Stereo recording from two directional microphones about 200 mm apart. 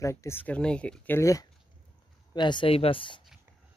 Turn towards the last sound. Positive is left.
turn(degrees=25)  # may be behind; listen again after turning